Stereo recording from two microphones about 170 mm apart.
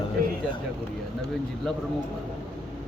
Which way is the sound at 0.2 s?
60° right (ahead or behind).